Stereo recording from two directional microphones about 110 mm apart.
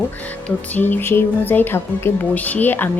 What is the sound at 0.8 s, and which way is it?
Speech, 15° left (ahead or behind).